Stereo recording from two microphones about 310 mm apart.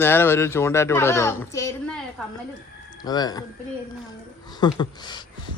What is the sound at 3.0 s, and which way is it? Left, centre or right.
Speech, centre.